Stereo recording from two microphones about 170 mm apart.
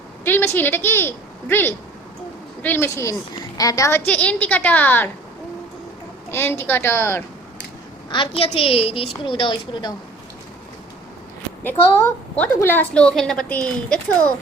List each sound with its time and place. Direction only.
0.3 s a woman's voice: 10° left (ahead or behind)
6.3 s a woman's voice: 15° left (ahead or behind)
8.1 s a woman's voice: 30° left (ahead or behind)
11.6 s a woman's voice: 10° left (ahead or behind)